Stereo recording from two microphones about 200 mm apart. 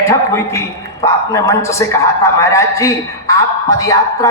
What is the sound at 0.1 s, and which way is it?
A man's voice, 15° left (ahead or behind).